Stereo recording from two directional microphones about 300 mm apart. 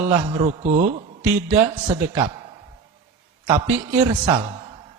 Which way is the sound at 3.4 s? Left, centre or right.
Centre.